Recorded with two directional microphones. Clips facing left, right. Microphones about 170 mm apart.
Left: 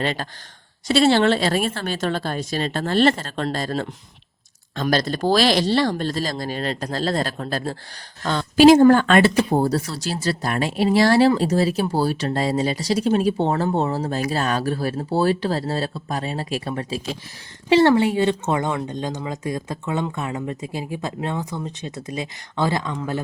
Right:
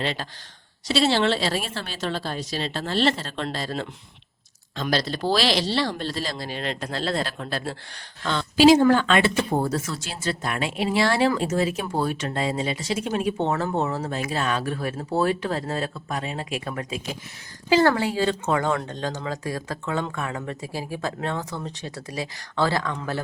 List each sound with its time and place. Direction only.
0.0 s speech: 50° left (ahead or behind); by 23.2 s 20° left (ahead or behind)